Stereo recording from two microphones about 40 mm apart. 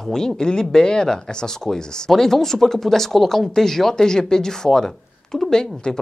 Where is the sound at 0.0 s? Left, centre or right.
Centre.